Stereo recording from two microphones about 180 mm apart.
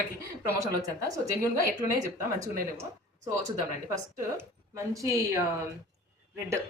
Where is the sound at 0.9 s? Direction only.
20° right (ahead or behind).